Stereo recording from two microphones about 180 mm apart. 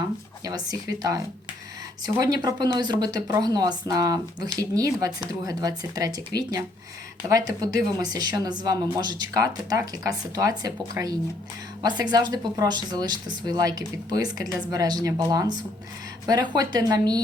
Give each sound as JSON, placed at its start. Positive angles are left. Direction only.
{"t": 0.4, "sound": "speech", "side_deg": -20}